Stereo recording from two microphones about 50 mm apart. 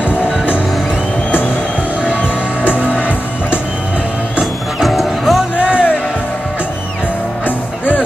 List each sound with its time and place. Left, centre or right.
2.6 s music: left
4.8 s music: centre
5.6 s music: right
7.4 s music: left